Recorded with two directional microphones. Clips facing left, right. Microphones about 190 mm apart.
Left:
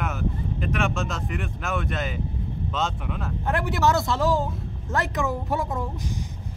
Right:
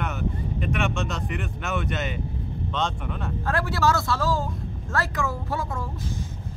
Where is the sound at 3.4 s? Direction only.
20° left (ahead or behind).